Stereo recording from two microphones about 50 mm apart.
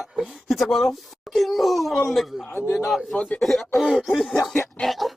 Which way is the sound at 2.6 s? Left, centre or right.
Left.